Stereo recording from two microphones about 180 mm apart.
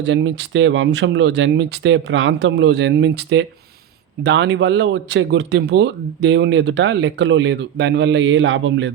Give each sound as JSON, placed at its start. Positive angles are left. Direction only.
{"t": 0.0, "sound": "speech", "side_deg": -85}
{"t": 4.2, "sound": "speech", "side_deg": -70}